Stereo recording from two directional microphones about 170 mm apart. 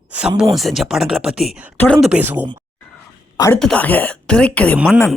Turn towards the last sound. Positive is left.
turn(degrees=15)  # may be behind; listen again after turning